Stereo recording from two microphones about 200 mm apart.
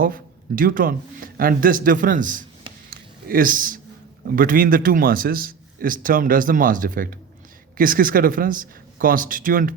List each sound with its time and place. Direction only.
0.0 s speech: 45° right (ahead or behind)
2.9 s a sound: 45° right (ahead or behind)
4.3 s a man's voice: 45° right (ahead or behind)